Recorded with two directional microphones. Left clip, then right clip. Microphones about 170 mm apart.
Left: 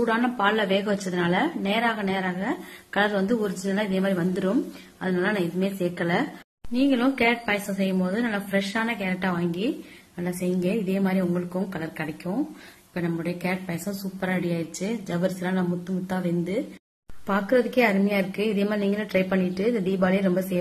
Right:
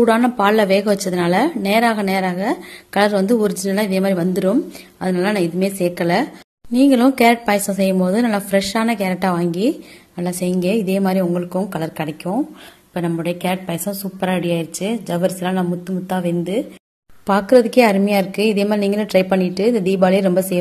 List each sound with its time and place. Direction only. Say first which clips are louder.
0.0 s a woman's voice: right 8 dB; 45° right (ahead or behind)
6.7 s speech: right 9 dB; 50° right (ahead or behind)
10.1 s a woman's voice: right 7 dB; 35° right (ahead or behind); by 16.5 s 20° right (ahead or behind)
17.3 s a woman's voice: right 9 dB; 30° right (ahead or behind)